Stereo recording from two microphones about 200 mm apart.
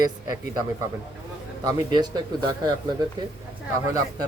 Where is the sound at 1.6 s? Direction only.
20° right (ahead or behind).